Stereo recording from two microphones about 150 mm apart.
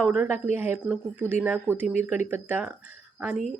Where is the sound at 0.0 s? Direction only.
10° right (ahead or behind).